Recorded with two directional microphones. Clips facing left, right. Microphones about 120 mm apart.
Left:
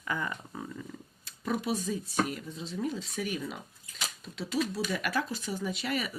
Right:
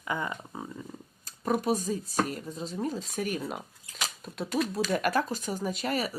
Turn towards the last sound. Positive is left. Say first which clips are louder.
# right 3 dB
turn(degrees=-40)  # may be behind; listen again after turning